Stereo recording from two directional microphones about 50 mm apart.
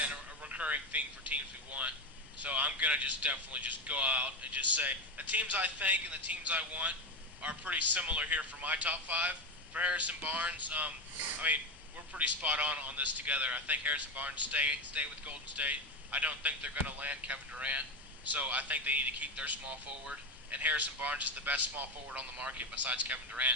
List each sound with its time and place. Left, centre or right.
0.1 s a man's voice: right